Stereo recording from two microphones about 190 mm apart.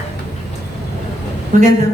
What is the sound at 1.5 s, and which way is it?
Speech, 40° right (ahead or behind).